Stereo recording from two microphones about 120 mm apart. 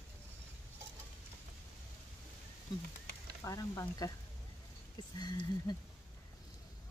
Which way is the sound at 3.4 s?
30° left (ahead or behind).